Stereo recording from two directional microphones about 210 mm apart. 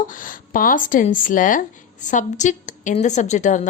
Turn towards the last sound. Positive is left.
turn(degrees=35)  # may be behind; listen again after turning